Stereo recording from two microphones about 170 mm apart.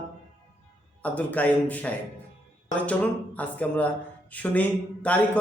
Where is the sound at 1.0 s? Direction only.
10° left (ahead or behind).